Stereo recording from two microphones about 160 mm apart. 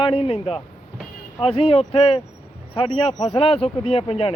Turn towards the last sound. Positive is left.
turn(degrees=40)  # may be behind; listen again after turning